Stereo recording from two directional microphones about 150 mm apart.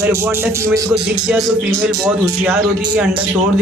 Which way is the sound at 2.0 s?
15° right (ahead or behind).